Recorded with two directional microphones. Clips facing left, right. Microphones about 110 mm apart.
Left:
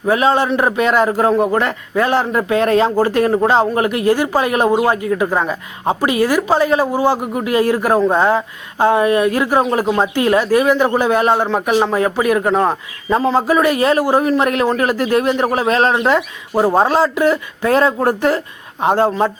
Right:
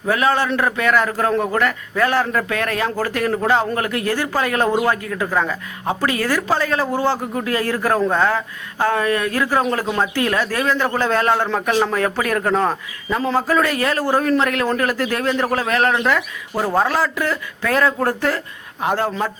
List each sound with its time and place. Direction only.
0.0 s a woman's voice: 20° left (ahead or behind)
13.1 s a woman's voice: 30° left (ahead or behind)
13.5 s a woman's voice: 20° left (ahead or behind)